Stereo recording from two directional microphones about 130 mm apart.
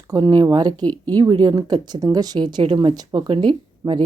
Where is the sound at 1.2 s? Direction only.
30° right (ahead or behind).